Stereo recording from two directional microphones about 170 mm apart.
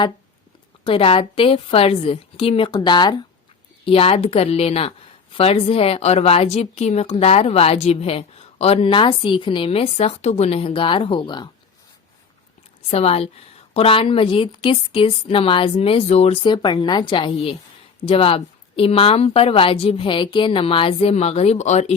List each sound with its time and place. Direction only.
0.9 s a woman's voice: 35° left (ahead or behind)
12.9 s a woman's voice: 35° left (ahead or behind)